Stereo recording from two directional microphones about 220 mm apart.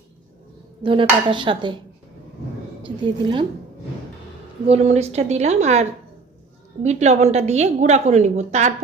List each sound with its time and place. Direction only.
0.8 s dishes: 20° right (ahead or behind)
2.8 s dishes: 20° right (ahead or behind)
4.6 s a woman's voice: 30° right (ahead or behind)